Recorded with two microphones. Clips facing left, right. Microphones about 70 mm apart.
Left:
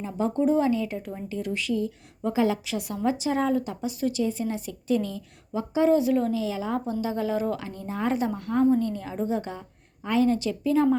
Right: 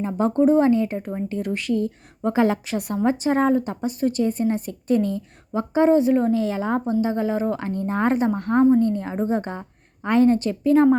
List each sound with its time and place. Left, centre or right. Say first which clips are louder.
0.0 s a woman's voice: right 6 dB; right
6.4 s a woman's voice: right 5 dB; right
7.6 s a woman's voice: right 7 dB; right